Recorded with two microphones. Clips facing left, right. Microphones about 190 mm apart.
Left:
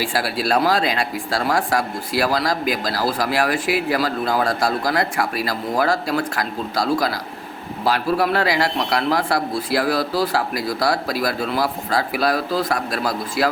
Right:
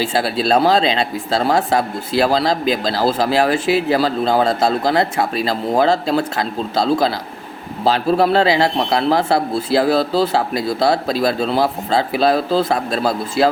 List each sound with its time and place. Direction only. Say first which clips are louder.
0.0 s speech: right 4 dB; 25° right (ahead or behind)